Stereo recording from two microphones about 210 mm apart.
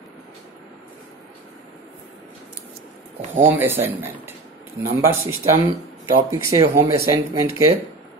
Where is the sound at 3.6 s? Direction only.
10° right (ahead or behind).